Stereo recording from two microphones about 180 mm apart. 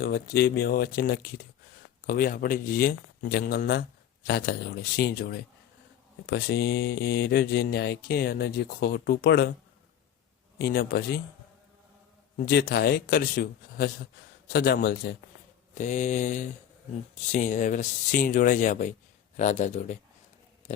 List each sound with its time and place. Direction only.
0.0 s speech: 60° left (ahead or behind)
10.6 s speech: 60° left (ahead or behind)
12.5 s speech: 60° left (ahead or behind)
15.7 s mantra: 40° left (ahead or behind)
17.2 s speech: 45° left (ahead or behind)
19.4 s mantra: 40° left (ahead or behind)
20.6 s a sound: 40° left (ahead or behind)